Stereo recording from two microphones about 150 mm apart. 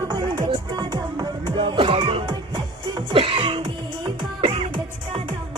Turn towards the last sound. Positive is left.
turn(degrees=-35)  # may be behind; listen again after turning